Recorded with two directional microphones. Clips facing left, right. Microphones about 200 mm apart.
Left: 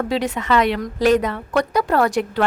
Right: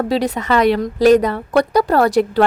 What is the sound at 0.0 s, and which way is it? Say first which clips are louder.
A woman's voice: right 4 dB; 35° right (ahead or behind).